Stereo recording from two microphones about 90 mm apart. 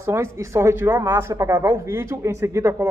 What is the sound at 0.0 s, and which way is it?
Speech, 30° right (ahead or behind).